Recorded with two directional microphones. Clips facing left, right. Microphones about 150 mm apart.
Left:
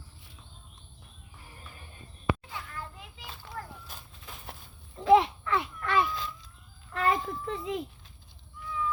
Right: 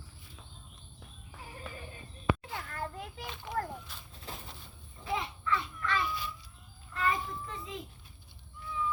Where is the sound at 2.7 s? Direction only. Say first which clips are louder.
Right 4 dB; 50° right (ahead or behind).